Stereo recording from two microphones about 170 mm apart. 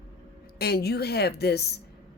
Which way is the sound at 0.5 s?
65° left (ahead or behind).